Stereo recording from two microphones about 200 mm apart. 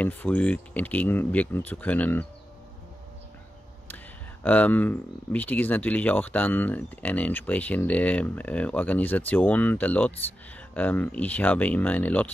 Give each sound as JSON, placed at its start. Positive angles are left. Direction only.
{"t": 0.0, "sound": "speech", "side_deg": 5}
{"t": 3.9, "sound": "speech", "side_deg": 10}